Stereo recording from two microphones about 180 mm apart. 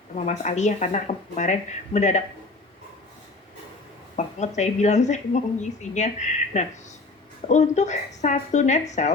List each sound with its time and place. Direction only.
0.3 s speech: 40° left (ahead or behind)
4.2 s speech: 40° left (ahead or behind)